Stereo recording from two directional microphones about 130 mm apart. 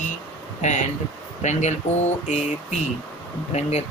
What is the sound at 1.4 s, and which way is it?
Speech, 65° left (ahead or behind).